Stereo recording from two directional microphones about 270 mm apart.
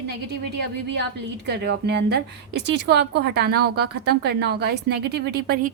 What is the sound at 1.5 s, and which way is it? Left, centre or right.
A woman's voice, right.